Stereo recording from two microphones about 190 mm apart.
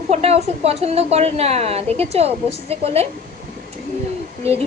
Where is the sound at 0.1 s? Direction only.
35° right (ahead or behind).